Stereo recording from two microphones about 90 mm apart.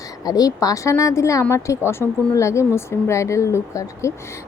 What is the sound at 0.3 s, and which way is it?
A woman's voice, 45° left (ahead or behind).